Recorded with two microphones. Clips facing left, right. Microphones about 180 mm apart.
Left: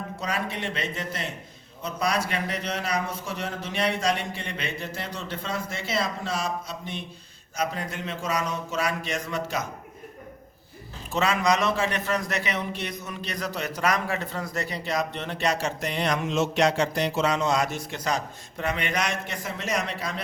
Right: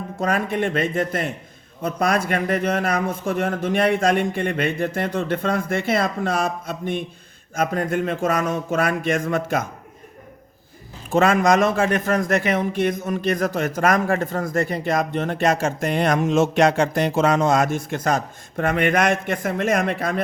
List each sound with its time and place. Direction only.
0.2 s a man's voice: 50° right (ahead or behind)
11.1 s a man's voice: 50° right (ahead or behind)